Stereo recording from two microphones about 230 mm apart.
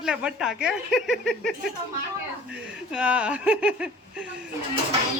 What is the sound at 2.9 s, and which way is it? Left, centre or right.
Speech, centre.